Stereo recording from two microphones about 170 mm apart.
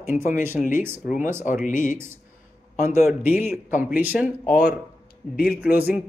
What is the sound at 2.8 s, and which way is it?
Speech, 15° right (ahead or behind).